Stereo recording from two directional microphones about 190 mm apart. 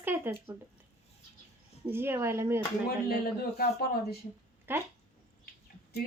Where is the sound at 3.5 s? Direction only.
55° left (ahead or behind).